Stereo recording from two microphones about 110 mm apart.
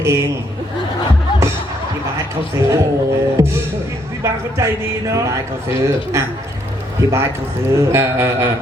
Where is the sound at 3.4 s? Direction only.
25° right (ahead or behind).